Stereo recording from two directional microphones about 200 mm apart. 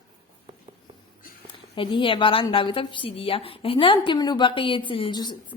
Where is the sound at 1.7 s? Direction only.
25° left (ahead or behind).